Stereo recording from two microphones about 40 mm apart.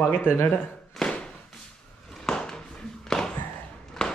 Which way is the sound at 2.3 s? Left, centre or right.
Centre.